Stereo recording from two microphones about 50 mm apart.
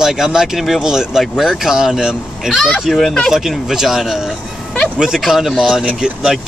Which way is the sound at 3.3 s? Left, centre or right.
Centre.